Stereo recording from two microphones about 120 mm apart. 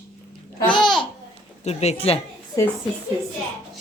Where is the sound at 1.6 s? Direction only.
65° left (ahead or behind).